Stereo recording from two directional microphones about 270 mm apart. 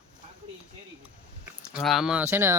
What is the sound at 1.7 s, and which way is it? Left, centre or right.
Speech, centre.